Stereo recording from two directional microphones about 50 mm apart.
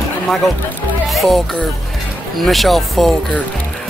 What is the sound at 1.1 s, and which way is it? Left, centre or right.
Speech, centre.